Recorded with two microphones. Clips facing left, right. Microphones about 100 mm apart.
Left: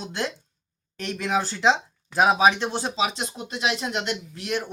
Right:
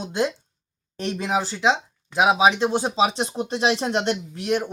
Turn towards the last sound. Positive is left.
turn(degrees=-20)  # may be behind; listen again after turning